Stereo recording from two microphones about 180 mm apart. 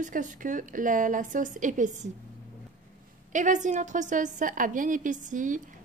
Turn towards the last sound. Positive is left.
turn(degrees=-45)  # may be behind; listen again after turning